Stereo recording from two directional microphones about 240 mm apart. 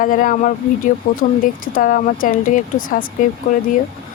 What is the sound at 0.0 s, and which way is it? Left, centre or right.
Speech, left.